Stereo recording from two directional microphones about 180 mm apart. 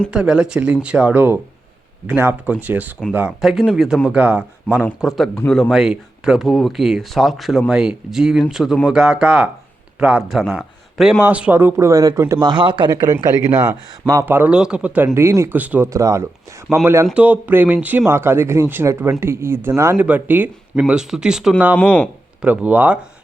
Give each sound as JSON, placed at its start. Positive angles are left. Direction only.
{"t": 0.1, "sound": "a man's voice", "side_deg": -5}
{"t": 21.8, "sound": "speech", "side_deg": 5}
{"t": 22.4, "sound": "speech", "side_deg": -10}